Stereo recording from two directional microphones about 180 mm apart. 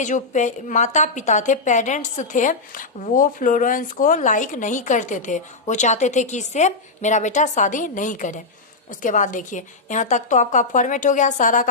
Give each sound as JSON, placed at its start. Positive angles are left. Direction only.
{"t": 0.0, "sound": "a woman's voice", "side_deg": 45}